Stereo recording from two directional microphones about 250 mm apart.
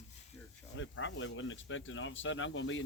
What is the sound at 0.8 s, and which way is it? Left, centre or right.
Speech, left.